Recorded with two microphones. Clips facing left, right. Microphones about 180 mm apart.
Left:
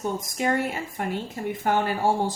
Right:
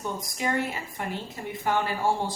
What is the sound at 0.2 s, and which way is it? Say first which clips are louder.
A woman's voice: left 3 dB; 45° left (ahead or behind).